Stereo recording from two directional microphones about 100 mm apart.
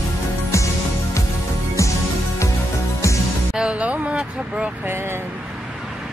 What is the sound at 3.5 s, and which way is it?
Vehicle, 10° right (ahead or behind).